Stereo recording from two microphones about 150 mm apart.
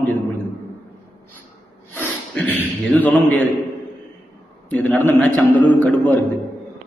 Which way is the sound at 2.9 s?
10° left (ahead or behind).